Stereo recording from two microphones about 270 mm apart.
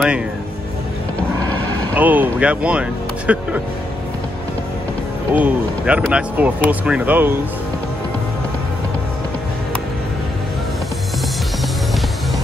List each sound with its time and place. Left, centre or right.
2.0 s speech: centre
5.3 s speech: centre